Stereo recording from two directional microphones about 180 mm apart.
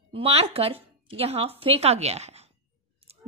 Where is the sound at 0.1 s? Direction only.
30° right (ahead or behind).